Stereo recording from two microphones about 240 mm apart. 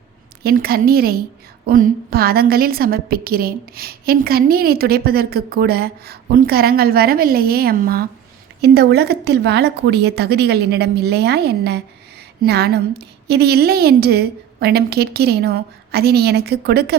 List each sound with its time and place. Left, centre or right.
0.4 s a woman's voice: right